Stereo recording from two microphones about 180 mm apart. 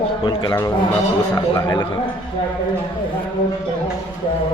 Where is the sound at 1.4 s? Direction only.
20° left (ahead or behind).